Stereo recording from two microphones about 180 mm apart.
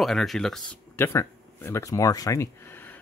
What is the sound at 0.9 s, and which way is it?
Speech, 15° left (ahead or behind).